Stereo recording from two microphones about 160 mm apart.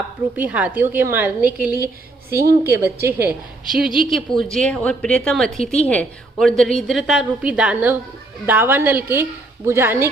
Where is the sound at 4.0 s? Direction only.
Centre (ahead or behind).